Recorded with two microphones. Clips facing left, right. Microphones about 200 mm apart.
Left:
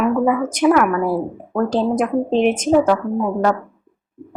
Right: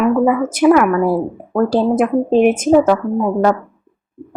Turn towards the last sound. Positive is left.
turn(degrees=-5)  # may be behind; listen again after turning